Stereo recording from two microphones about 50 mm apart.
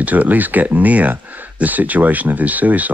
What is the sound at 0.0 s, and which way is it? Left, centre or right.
Speech, right.